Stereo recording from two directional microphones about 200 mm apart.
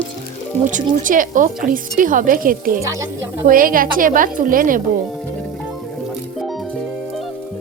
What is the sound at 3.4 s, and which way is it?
Speech, 45° right (ahead or behind).